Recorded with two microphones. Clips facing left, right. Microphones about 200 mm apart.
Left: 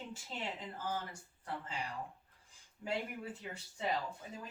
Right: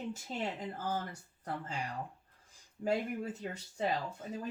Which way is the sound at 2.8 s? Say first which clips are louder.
Right 8 dB; 40° right (ahead or behind).